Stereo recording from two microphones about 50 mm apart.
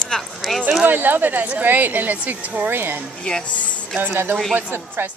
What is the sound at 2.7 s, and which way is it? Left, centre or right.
Speech, right.